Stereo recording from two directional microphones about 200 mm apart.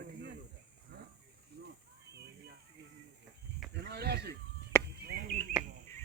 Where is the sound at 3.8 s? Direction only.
55° right (ahead or behind).